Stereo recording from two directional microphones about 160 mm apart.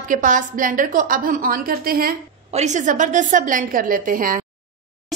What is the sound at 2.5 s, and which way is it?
A woman's voice, 45° right (ahead or behind).